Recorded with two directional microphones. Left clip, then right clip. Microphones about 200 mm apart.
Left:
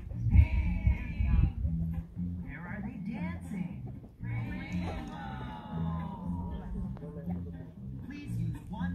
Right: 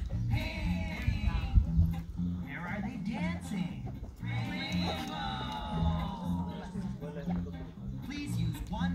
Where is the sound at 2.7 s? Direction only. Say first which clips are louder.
Right 1 dB; 30° right (ahead or behind).